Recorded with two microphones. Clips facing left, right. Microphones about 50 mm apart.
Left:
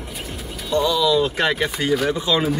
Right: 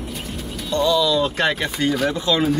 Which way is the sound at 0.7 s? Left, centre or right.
Centre.